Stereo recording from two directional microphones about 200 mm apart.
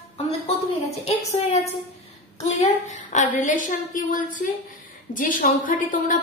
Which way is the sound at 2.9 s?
35° left (ahead or behind).